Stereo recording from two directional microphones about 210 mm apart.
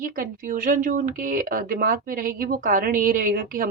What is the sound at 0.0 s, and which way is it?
Speech, 40° right (ahead or behind).